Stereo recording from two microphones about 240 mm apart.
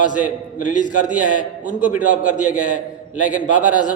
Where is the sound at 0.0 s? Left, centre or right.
Left.